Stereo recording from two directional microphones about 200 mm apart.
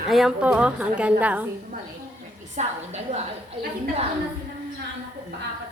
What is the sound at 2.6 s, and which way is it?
Speech, 35° right (ahead or behind).